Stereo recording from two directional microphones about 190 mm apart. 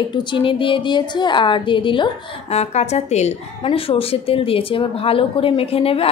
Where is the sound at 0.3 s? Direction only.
25° left (ahead or behind).